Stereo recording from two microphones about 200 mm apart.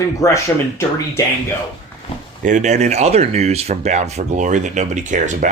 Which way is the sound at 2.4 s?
35° right (ahead or behind).